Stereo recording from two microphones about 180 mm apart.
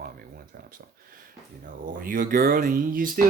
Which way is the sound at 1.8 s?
50° right (ahead or behind).